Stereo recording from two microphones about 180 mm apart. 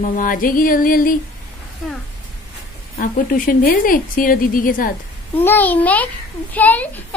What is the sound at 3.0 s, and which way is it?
A woman's voice, 50° left (ahead or behind).